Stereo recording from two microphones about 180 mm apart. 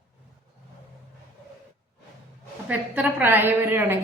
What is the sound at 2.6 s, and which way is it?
A woman's voice, 10° right (ahead or behind).